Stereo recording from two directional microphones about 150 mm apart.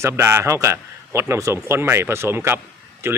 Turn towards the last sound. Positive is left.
turn(degrees=-15)  # may be behind; listen again after turning